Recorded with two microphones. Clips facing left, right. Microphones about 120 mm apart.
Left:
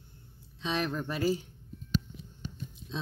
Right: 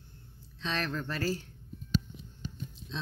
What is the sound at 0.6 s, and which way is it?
Speech, 15° left (ahead or behind).